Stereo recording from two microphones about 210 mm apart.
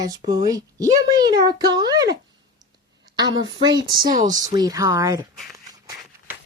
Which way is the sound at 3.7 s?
20° right (ahead or behind).